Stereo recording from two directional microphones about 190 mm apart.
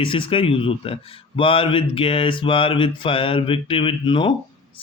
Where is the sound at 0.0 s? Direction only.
30° left (ahead or behind).